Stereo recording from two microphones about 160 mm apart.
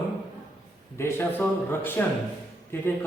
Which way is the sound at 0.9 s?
15° left (ahead or behind).